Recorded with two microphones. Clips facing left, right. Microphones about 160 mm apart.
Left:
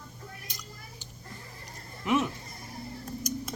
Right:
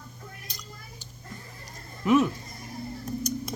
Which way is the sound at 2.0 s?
20° left (ahead or behind).